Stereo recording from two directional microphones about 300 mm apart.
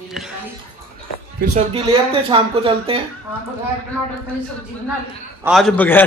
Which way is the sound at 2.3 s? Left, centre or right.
Centre.